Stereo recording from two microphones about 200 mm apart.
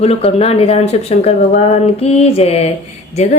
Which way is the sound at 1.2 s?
30° left (ahead or behind).